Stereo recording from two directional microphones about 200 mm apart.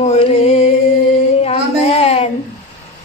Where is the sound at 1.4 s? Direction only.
30° left (ahead or behind).